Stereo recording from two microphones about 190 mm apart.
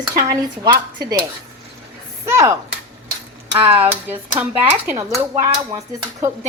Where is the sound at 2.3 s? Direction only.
15° right (ahead or behind).